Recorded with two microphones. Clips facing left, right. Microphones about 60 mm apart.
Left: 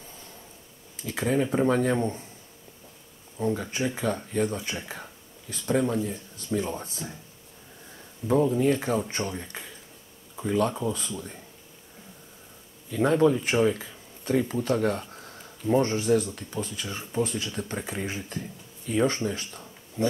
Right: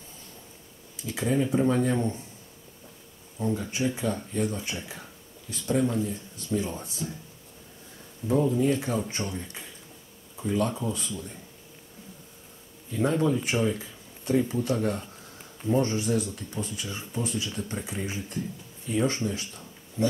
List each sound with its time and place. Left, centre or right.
1.0 s speech: left
3.7 s speech: left
8.2 s speech: left
10.5 s speech: left
12.9 s speech: left